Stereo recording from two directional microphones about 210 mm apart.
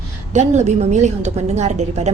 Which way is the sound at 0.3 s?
35° right (ahead or behind).